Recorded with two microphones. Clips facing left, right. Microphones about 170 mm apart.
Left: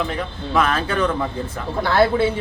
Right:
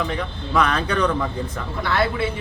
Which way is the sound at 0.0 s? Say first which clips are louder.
Left 1 dB; centre (ahead or behind).